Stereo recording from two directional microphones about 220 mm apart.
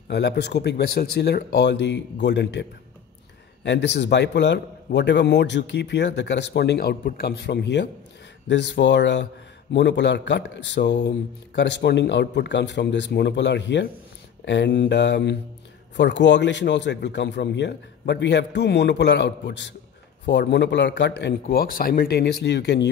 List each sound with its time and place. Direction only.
0.1 s a man's voice: 50° left (ahead or behind)
3.6 s a man's voice: 50° left (ahead or behind)